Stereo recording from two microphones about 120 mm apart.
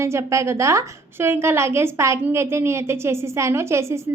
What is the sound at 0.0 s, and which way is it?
Speech, 25° right (ahead or behind).